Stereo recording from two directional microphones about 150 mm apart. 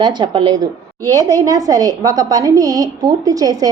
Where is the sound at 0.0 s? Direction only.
30° right (ahead or behind).